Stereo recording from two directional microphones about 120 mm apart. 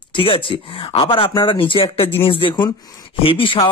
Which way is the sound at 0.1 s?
50° left (ahead or behind).